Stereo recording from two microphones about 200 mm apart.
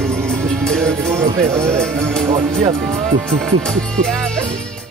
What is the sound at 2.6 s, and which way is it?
Speech, 35° right (ahead or behind).